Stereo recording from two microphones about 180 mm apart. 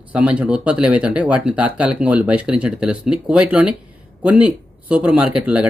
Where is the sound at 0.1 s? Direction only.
5° right (ahead or behind).